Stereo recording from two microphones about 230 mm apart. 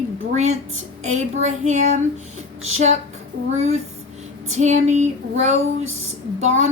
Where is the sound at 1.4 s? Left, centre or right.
Right.